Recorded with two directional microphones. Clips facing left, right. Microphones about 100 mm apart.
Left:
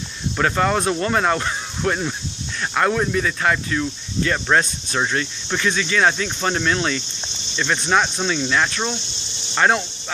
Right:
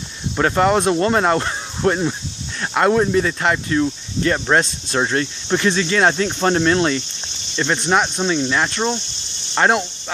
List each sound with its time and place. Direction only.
0.4 s speech: 25° right (ahead or behind)
9.7 s speech: 15° right (ahead or behind)